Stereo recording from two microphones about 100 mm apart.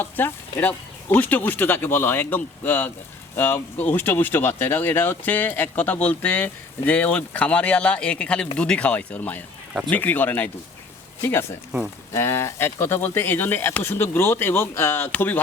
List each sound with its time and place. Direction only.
0.0 s speech: 20° left (ahead or behind)